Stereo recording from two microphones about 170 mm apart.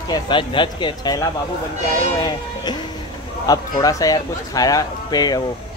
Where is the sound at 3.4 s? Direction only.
20° left (ahead or behind).